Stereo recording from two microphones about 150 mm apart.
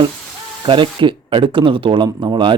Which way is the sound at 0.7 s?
35° right (ahead or behind).